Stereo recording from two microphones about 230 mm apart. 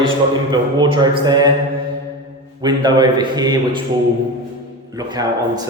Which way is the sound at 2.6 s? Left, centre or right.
Centre.